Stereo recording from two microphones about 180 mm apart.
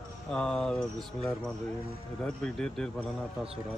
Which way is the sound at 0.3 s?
5° left (ahead or behind).